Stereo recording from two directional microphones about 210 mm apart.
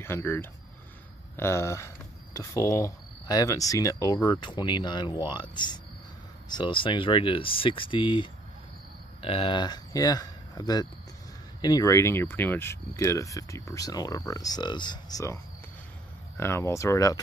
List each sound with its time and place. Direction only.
0.0 s speech: 10° left (ahead or behind)
16.3 s speech: 10° left (ahead or behind)